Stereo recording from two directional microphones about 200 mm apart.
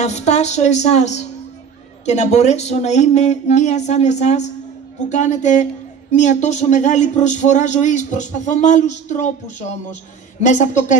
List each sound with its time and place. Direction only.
0.0 s speech: 35° left (ahead or behind)